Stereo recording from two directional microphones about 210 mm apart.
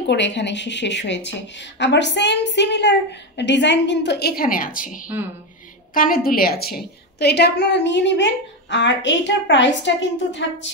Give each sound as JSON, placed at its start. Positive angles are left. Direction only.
{"t": 0.0, "sound": "a woman's voice", "side_deg": 55}